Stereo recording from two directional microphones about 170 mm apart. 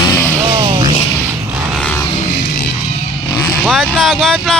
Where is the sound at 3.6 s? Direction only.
Centre (ahead or behind).